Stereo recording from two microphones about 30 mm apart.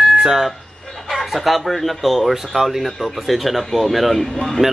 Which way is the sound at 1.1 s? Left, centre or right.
Centre.